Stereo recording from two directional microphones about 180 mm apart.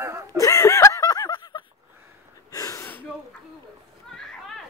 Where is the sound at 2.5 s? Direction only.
20° left (ahead or behind).